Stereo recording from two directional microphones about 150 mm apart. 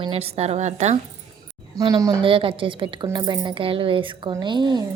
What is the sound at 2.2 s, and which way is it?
A woman's voice, 35° right (ahead or behind).